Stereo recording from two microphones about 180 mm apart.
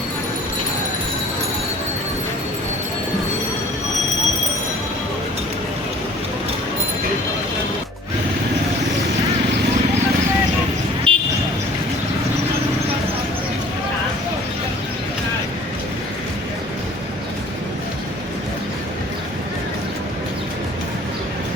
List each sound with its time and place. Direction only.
11.1 s vehicle: 30° right (ahead or behind)